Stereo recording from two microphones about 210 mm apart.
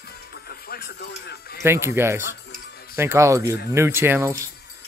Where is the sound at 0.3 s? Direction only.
45° left (ahead or behind).